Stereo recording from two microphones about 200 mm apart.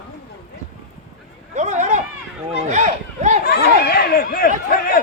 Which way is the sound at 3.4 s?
50° left (ahead or behind).